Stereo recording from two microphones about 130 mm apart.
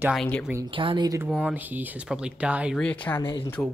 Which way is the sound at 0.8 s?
40° right (ahead or behind).